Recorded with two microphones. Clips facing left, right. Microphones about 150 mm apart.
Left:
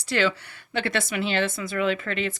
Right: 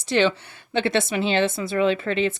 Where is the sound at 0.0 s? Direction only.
25° right (ahead or behind).